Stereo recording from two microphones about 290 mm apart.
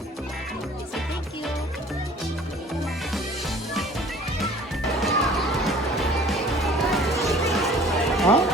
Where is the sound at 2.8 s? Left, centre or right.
Centre.